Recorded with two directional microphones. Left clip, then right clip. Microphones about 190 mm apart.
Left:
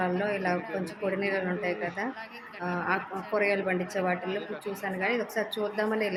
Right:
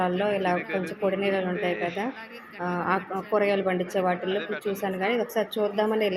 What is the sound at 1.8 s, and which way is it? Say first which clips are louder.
Speech: right 4 dB; centre (ahead or behind).